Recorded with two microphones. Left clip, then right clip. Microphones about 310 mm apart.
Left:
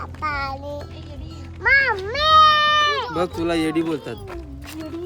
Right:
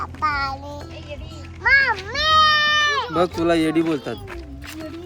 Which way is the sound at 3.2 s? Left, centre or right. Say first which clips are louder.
Right 3 dB; centre.